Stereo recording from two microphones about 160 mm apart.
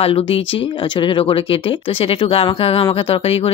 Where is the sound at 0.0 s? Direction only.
35° left (ahead or behind).